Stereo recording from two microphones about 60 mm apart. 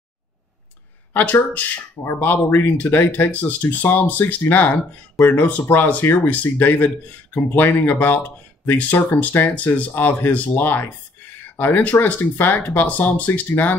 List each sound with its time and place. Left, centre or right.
1.1 s speech: left